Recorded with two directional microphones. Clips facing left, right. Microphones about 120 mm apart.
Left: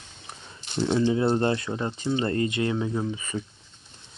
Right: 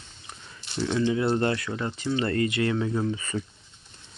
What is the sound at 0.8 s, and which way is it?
Speech, 25° left (ahead or behind).